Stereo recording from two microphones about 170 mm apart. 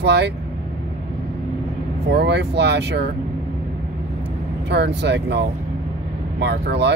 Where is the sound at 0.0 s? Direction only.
85° right.